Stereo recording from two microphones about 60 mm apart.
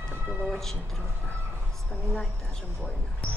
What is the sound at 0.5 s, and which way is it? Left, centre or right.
Speech, centre.